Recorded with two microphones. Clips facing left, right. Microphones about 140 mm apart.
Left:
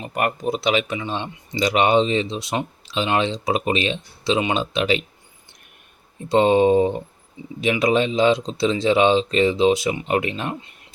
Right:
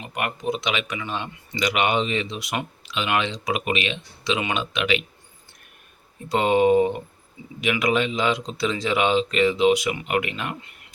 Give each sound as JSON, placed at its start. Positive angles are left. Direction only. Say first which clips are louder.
{"t": 0.0, "sound": "speech", "louder": "left 4 dB", "side_deg": 40}
{"t": 6.2, "sound": "speech", "louder": "left 3 dB", "side_deg": 30}